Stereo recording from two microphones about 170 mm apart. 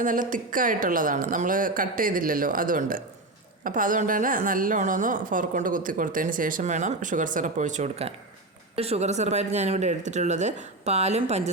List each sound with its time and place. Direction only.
0.0 s a woman's voice: 50° right (ahead or behind)